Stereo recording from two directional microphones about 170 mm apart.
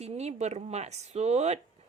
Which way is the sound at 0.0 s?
40° right (ahead or behind).